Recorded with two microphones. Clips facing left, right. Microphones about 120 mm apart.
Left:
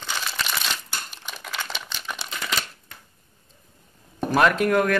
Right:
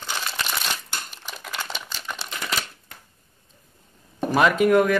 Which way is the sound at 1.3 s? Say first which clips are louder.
Even; 5° right (ahead or behind).